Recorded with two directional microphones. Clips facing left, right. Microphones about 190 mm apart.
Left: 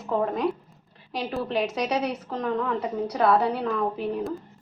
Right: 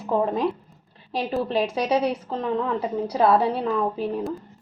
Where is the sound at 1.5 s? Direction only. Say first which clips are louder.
Right 2 dB; 30° right (ahead or behind).